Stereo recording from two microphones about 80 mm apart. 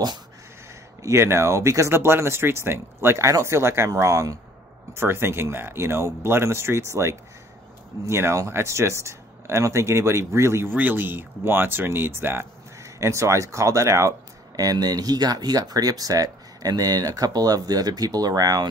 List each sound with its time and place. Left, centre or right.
1.0 s speech: right
10.7 s speech: right
14.6 s speech: right